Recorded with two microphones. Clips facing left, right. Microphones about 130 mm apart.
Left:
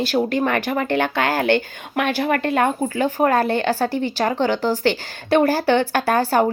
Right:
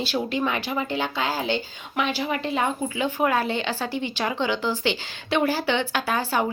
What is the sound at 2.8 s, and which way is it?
Speech, 45° left (ahead or behind).